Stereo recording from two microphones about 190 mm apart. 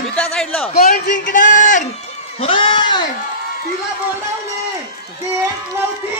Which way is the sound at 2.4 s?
25° left (ahead or behind).